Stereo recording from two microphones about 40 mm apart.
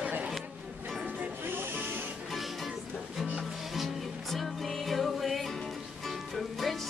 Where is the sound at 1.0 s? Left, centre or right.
Right.